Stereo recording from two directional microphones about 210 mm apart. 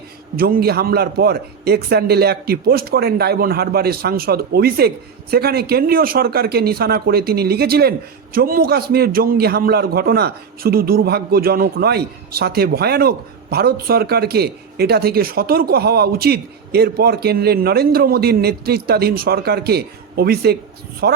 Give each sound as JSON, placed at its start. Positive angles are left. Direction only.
{"t": 0.3, "sound": "speech", "side_deg": -45}